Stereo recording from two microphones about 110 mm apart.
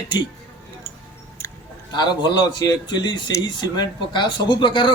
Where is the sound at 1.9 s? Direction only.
40° left (ahead or behind).